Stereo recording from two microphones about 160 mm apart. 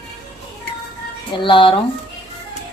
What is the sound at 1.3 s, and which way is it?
Speech, 30° left (ahead or behind).